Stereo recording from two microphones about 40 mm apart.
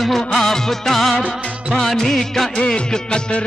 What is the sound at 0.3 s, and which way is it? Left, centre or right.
Music of bollywood, centre.